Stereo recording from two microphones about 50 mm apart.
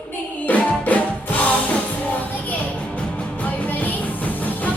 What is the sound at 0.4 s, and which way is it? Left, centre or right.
Music, left.